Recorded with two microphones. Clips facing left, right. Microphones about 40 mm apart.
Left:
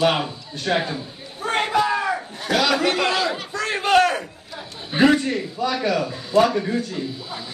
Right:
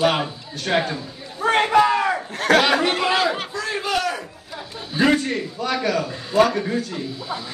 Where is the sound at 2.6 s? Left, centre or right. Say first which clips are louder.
Right 1 dB; right.